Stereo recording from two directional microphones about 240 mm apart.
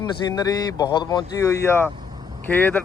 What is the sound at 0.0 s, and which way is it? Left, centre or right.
A man's voice, centre.